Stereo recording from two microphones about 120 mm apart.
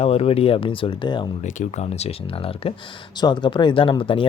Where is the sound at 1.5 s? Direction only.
80° left; by 2.7 s 50° left (ahead or behind).